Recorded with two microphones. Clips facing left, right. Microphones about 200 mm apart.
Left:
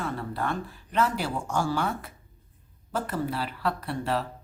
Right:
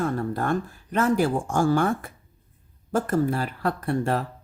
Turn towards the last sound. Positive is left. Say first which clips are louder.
# right 4 dB
turn(degrees=-50)  # may be behind; listen again after turning